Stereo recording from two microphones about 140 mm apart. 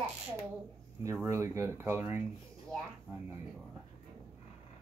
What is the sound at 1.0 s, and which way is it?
Speech, 20° right (ahead or behind).